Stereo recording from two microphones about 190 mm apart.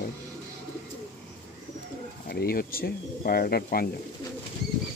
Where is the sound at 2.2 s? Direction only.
55° left (ahead or behind).